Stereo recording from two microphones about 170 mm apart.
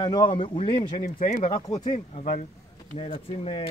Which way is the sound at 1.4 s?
25° left (ahead or behind).